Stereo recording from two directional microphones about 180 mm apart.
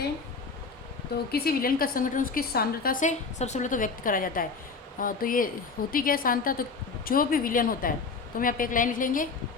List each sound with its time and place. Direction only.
1.3 s a woman's voice: 55° left (ahead or behind)